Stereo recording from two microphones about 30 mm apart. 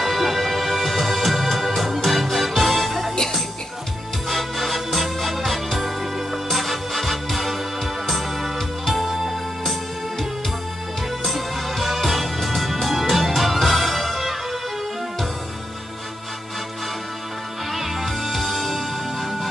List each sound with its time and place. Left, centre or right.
0.0 s music: centre
4.3 s music: centre
11.2 s music: centre
17.7 s music: centre